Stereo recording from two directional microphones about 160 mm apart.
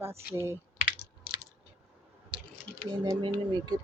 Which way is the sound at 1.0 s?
75° left (ahead or behind).